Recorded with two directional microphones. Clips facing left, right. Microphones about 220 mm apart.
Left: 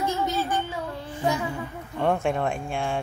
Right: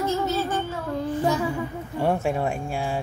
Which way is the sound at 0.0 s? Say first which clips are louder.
Right 2 dB; 15° left (ahead or behind).